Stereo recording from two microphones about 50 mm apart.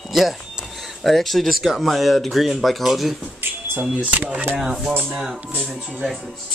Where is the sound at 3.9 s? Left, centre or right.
Right.